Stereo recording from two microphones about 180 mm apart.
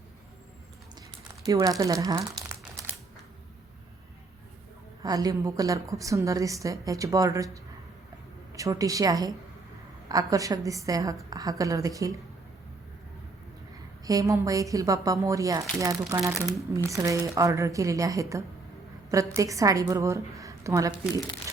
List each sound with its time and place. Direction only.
1.5 s speech: 20° right (ahead or behind)
5.0 s a woman's voice: 20° right (ahead or behind)
14.0 s a woman's voice: 20° right (ahead or behind)